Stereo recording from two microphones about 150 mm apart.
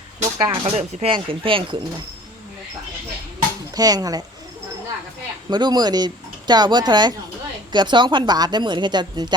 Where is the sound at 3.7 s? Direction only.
25° right (ahead or behind).